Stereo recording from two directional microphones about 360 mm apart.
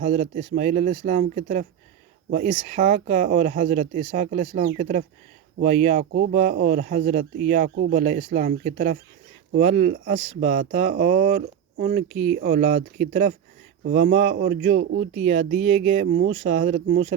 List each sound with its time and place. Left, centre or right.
0.0 s speech: centre